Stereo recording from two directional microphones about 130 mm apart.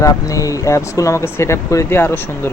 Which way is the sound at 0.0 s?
25° left (ahead or behind).